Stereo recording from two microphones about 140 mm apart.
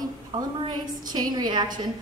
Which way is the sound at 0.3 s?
35° right (ahead or behind).